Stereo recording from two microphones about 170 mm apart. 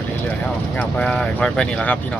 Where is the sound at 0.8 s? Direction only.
5° left (ahead or behind).